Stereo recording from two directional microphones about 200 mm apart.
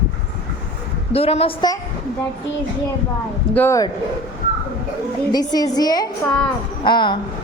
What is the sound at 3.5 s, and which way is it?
Speech, 15° left (ahead or behind).